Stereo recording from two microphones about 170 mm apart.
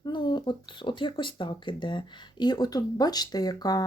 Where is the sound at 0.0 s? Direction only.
25° left (ahead or behind).